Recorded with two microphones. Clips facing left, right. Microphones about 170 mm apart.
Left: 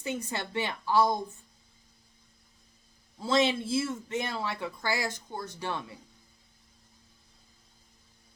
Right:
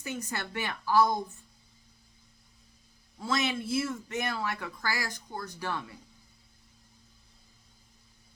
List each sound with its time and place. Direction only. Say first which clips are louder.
0.0 s speech: left 2 dB; 25° left (ahead or behind)
3.2 s speech: left 4 dB; 25° left (ahead or behind)